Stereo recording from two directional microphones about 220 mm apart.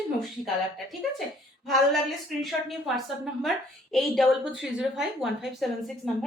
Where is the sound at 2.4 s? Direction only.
Centre (ahead or behind).